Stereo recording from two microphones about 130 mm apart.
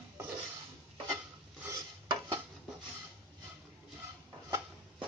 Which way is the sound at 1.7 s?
35° right (ahead or behind).